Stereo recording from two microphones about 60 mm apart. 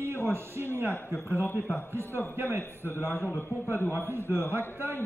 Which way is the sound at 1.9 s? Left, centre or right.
Right.